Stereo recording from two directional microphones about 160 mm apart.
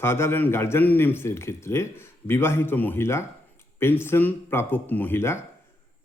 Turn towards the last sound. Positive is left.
turn(degrees=15)  # may be behind; listen again after turning